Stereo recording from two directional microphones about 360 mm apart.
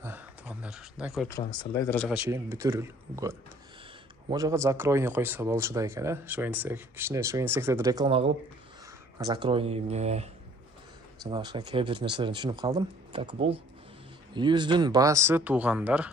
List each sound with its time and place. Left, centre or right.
0.0 s speech: centre